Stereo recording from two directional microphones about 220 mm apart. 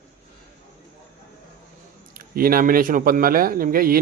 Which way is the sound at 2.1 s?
40° right (ahead or behind).